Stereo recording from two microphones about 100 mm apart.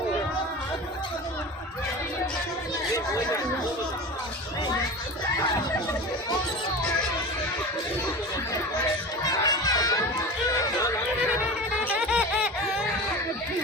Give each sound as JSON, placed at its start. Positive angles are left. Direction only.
{"t": 9.2, "sound": "a sound", "side_deg": 40}
{"t": 11.9, "sound": "music", "side_deg": -15}
{"t": 12.3, "sound": "laughter", "side_deg": -5}